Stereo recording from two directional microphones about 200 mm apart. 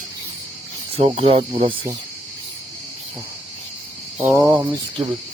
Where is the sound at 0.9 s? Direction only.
30° right (ahead or behind).